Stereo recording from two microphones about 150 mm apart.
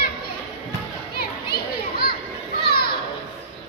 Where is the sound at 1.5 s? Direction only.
90° left.